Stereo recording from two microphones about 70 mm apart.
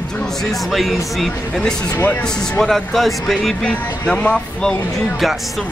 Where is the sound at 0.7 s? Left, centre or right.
Centre.